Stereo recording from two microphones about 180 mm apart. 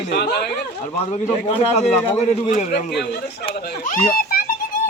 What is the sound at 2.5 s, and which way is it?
Speech, 45° left (ahead or behind).